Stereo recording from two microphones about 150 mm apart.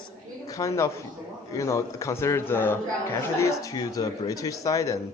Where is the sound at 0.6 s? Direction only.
20° left (ahead or behind).